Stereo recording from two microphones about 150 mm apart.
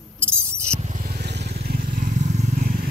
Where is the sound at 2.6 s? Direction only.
70° right (ahead or behind).